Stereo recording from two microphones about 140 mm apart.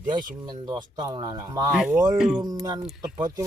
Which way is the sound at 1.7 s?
5° right (ahead or behind).